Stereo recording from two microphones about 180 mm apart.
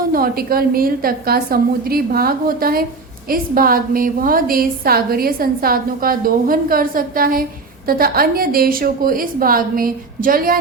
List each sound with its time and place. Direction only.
0.1 s a woman's voice: 55° right (ahead or behind)